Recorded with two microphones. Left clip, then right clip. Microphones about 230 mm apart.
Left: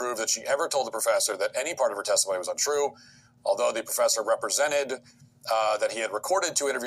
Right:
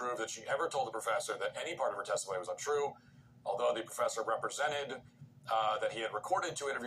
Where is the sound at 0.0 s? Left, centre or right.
Left.